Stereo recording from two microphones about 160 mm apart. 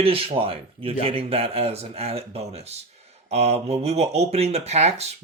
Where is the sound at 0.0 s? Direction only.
35° right (ahead or behind).